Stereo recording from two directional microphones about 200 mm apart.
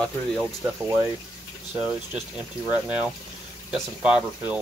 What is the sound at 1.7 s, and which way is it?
Speech, 5° right (ahead or behind).